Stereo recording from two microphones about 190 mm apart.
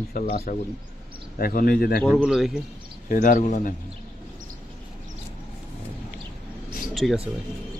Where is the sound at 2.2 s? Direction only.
5° right (ahead or behind).